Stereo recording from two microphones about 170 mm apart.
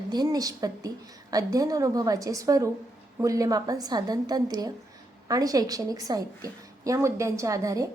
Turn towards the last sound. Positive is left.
turn(degrees=-20)  # may be behind; listen again after turning